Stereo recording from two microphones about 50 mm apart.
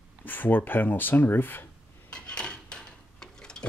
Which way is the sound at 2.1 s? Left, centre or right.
Centre.